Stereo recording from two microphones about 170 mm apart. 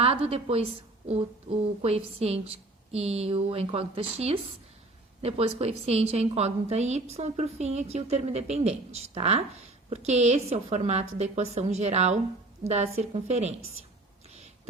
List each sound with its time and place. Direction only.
0.0 s a woman's voice: 35° right (ahead or behind)